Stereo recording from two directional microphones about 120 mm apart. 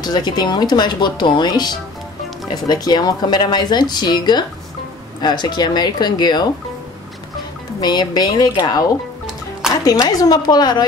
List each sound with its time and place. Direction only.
0.0 s speech: 35° left (ahead or behind)
7.8 s speech: 35° left (ahead or behind)
9.8 s speech: 30° left (ahead or behind)